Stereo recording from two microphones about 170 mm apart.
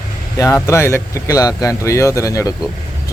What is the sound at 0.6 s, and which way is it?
Speech, 15° left (ahead or behind).